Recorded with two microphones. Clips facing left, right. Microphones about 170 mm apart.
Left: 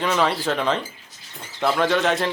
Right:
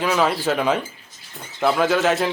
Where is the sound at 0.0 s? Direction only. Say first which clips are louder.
Right 2 dB; 5° right (ahead or behind).